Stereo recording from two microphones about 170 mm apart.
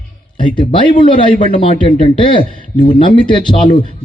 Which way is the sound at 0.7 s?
30° left (ahead or behind).